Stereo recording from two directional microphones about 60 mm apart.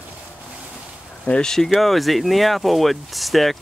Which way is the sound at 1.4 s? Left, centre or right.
Centre.